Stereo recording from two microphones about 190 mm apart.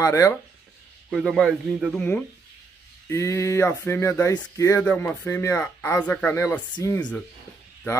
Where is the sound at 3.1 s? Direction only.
15° left (ahead or behind).